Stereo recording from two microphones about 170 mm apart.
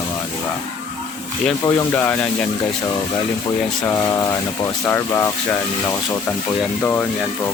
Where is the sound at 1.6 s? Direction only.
10° left (ahead or behind).